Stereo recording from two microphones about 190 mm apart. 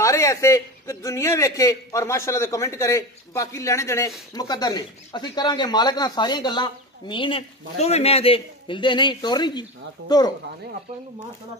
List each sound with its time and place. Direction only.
0.0 s a man's voice: 15° left (ahead or behind)